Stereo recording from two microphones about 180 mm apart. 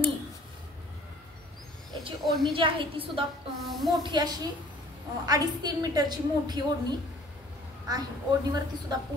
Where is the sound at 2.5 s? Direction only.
30° right (ahead or behind).